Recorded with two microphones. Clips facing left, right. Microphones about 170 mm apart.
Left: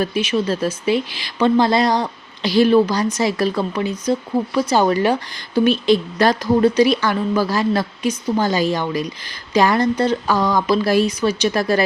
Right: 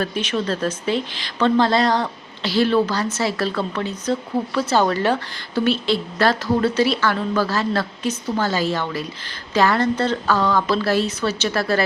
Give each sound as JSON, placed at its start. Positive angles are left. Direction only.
{"t": 0.0, "sound": "speech", "side_deg": 10}